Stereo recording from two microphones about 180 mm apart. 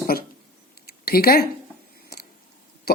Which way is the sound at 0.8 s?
60° left (ahead or behind).